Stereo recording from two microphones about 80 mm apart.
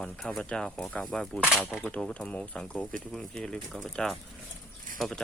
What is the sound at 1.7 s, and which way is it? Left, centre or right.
Speech, centre.